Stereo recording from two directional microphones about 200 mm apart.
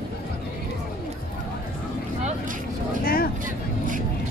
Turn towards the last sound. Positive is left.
turn(degrees=45)  # may be behind; listen again after turning